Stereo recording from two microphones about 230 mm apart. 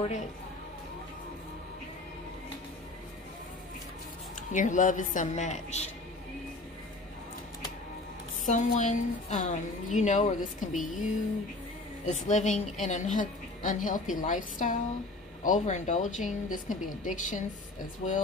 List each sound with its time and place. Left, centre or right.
4.5 s a woman's voice: left
8.5 s a woman's voice: left
12.1 s a woman's voice: left